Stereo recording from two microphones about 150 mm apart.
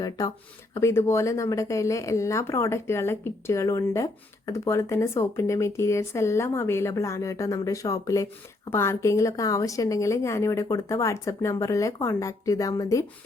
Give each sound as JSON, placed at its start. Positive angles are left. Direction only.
{"t": 0.2, "sound": "speech", "side_deg": 25}